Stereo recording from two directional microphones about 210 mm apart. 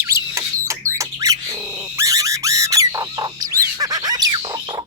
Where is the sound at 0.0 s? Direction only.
15° right (ahead or behind).